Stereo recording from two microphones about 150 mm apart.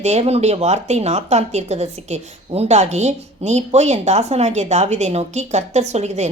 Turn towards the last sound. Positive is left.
turn(degrees=-50)  # may be behind; listen again after turning